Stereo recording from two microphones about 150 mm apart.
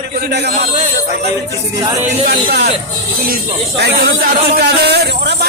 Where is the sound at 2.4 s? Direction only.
90° right.